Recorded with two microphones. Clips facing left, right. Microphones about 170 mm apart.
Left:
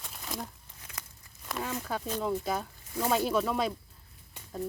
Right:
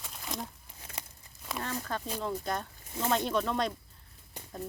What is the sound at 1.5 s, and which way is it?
Speech, 10° left (ahead or behind).